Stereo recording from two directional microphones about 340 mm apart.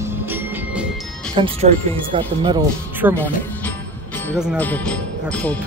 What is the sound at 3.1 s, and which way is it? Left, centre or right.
Speech, centre.